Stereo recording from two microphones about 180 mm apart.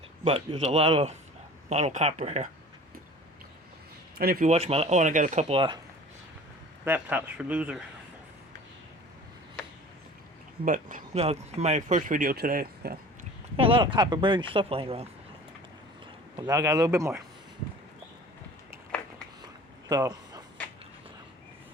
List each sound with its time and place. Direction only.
0.3 s speech: 35° right (ahead or behind)
4.2 s speech: 60° right (ahead or behind)
4.4 s speech: 35° right (ahead or behind)
6.8 s speech: 10° right (ahead or behind)
10.7 s speech: 45° right (ahead or behind)
13.6 s speech: 30° right (ahead or behind)
16.4 s speech: 20° right (ahead or behind)
19.9 s a sound: 20° right (ahead or behind)